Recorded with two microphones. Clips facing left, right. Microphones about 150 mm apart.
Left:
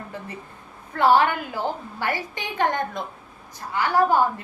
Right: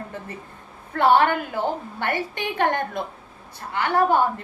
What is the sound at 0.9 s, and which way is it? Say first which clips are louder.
A woman's voice: right 1 dB; 60° right (ahead or behind).